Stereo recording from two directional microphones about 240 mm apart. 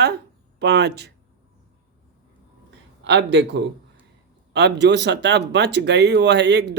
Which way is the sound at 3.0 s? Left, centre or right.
Right.